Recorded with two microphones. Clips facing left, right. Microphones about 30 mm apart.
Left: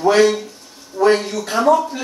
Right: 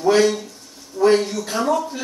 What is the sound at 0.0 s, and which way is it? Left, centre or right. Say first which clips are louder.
A man's voice: left 3 dB; centre.